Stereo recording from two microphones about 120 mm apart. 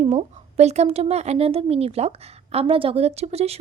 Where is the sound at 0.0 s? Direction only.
65° right (ahead or behind).